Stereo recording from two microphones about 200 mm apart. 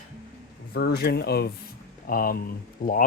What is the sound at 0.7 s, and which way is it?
Speech, 55° left (ahead or behind).